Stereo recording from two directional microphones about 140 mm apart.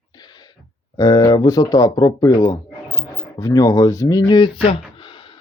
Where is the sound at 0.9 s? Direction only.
25° left (ahead or behind).